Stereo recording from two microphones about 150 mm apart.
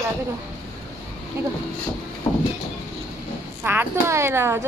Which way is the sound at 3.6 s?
15° right (ahead or behind).